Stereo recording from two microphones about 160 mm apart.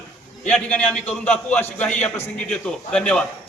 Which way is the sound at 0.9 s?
40° left (ahead or behind).